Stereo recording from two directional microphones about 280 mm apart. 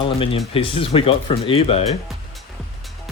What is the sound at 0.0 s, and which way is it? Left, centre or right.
Speech, centre.